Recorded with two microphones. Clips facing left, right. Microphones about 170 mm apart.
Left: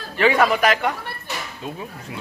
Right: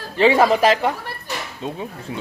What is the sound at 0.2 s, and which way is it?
Speech, 30° right (ahead or behind).